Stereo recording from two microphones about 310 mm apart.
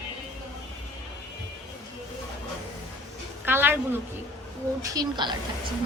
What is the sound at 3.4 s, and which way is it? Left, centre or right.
A woman's voice, centre.